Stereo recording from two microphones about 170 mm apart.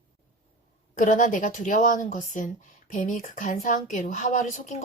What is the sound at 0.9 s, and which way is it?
A woman's voice, 50° left (ahead or behind).